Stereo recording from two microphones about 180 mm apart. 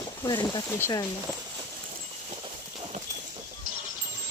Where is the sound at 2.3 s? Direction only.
30° right (ahead or behind).